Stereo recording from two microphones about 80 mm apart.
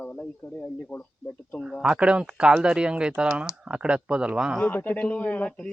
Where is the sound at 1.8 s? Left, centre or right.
Centre.